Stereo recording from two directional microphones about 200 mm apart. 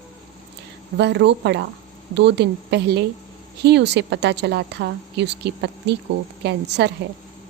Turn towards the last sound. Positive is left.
turn(degrees=-60)  # may be behind; listen again after turning